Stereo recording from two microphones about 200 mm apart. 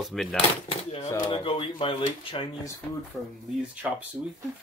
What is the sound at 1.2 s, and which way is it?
Speech, 25° left (ahead or behind).